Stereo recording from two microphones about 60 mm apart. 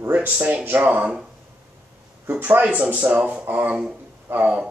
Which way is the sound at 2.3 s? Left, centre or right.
Right.